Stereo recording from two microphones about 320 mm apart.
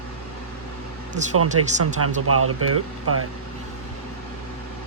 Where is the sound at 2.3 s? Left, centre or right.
Right.